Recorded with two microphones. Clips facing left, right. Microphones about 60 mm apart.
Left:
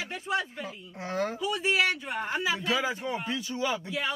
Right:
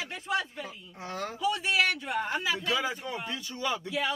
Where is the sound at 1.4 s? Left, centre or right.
Centre.